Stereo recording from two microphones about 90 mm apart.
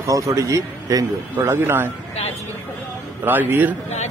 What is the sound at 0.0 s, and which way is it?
Speech, 40° right (ahead or behind).